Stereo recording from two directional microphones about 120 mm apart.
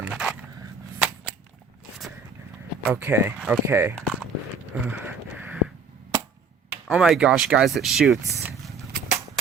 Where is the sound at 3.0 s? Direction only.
15° right (ahead or behind).